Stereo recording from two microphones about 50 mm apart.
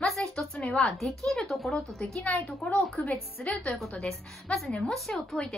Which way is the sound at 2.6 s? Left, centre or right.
Left.